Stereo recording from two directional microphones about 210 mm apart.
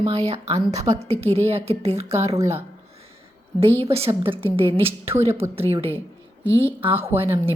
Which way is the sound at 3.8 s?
30° right (ahead or behind).